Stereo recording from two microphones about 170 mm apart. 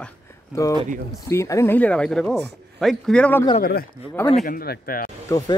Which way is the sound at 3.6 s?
65° left (ahead or behind).